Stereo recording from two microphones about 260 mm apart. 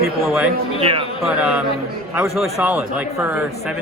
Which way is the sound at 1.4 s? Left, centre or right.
Centre.